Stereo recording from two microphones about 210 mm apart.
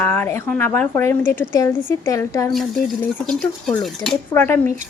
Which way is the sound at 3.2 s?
5° left (ahead or behind).